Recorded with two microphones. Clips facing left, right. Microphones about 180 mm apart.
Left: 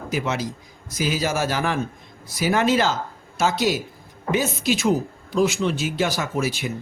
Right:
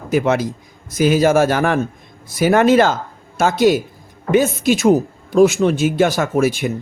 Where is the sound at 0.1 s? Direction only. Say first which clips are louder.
Right 9 dB; 55° right (ahead or behind).